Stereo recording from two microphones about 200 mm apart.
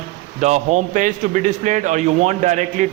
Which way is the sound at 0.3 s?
35° right (ahead or behind).